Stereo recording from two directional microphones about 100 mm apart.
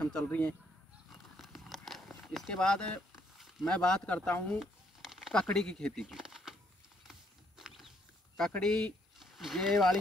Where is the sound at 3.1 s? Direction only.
Centre (ahead or behind).